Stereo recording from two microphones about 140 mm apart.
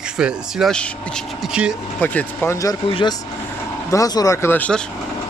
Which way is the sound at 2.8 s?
35° left (ahead or behind).